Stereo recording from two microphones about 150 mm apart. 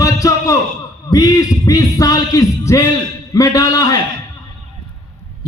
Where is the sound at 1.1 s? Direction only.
25° left (ahead or behind).